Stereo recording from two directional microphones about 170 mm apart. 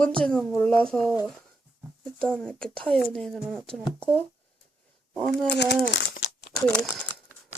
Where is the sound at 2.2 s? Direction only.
5° left (ahead or behind).